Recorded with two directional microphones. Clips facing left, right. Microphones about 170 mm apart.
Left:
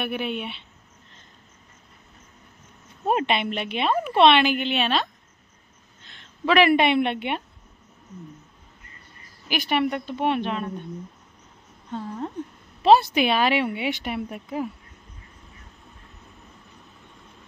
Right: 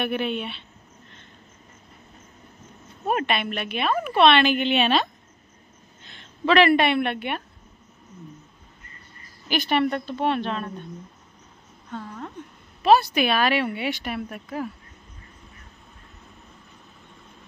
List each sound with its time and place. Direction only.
0.0 s a woman's voice: 10° left (ahead or behind)
3.1 s a woman's voice: 20° left (ahead or behind); by 5.0 s centre (ahead or behind)
6.4 s a woman's voice: 10° left (ahead or behind)
9.5 s a woman's voice: 10° left (ahead or behind)
11.9 s a sound: 25° left (ahead or behind)
12.8 s a woman's voice: 25° left (ahead or behind)